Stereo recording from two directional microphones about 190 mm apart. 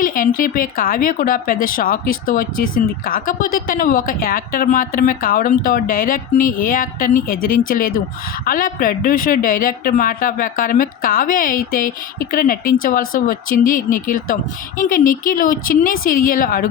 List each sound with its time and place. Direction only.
0.0 s speech: 45° left (ahead or behind)